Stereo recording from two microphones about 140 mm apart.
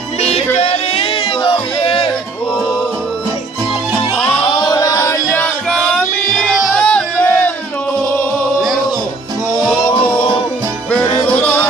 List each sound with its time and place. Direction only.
0.6 s music: 45° left (ahead or behind)
4.4 s music: 30° left (ahead or behind)
5.7 s music: centre (ahead or behind)
6.8 s music: 10° left (ahead or behind)
9.6 s music: 5° left (ahead or behind)
11.2 s music: 10° left (ahead or behind)